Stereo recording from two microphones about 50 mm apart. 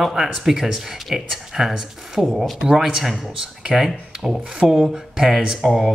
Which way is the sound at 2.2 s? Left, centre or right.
Centre.